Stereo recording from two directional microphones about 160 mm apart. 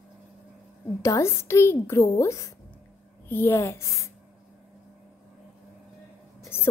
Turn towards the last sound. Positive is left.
turn(degrees=15)  # may be behind; listen again after turning